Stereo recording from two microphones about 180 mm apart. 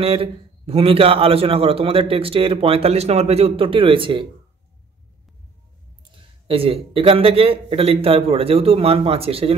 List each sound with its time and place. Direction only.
0.0 s a man's voice: 30° right (ahead or behind)
6.4 s a man's voice: 30° right (ahead or behind)